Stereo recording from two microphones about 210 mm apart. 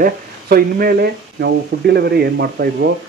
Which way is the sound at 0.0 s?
45° right (ahead or behind).